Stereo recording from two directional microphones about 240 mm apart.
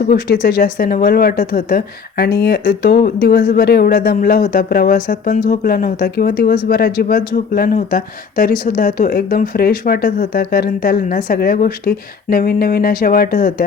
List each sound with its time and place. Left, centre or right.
0.0 s a woman's voice: left